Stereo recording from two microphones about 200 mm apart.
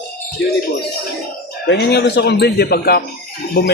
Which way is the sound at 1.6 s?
55° left (ahead or behind).